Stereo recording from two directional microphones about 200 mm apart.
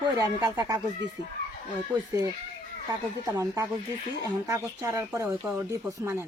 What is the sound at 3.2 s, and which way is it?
Speech, 15° right (ahead or behind).